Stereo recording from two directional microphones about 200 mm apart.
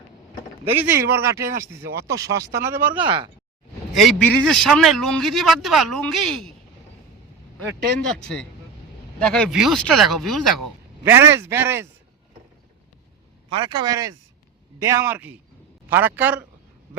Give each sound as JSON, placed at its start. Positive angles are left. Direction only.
{"t": 0.8, "sound": "a man's voice", "side_deg": -10}
{"t": 3.9, "sound": "a man's voice", "side_deg": 5}
{"t": 7.9, "sound": "a man's voice", "side_deg": 5}
{"t": 11.0, "sound": "speech", "side_deg": -10}
{"t": 13.5, "sound": "a man's voice", "side_deg": -25}